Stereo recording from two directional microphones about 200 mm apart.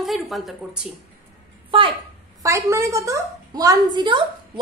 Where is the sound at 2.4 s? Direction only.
15° right (ahead or behind).